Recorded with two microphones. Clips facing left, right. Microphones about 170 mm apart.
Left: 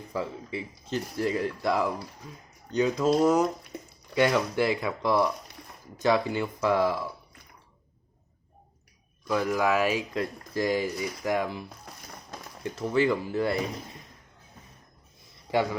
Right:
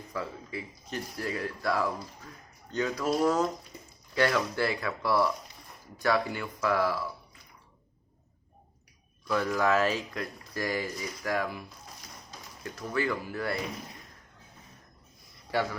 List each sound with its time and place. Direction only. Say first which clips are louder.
0.1 s speech: left 4 dB; 25° left (ahead or behind)
9.2 s speech: left 2 dB; 15° left (ahead or behind)
12.6 s speech: left 6 dB; 25° left (ahead or behind)
15.4 s a man's voice: left 4 dB; 15° left (ahead or behind)